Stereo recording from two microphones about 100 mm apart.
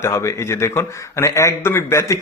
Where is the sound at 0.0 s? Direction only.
25° left (ahead or behind).